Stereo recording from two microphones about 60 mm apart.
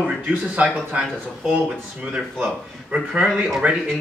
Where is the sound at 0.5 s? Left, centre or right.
Right.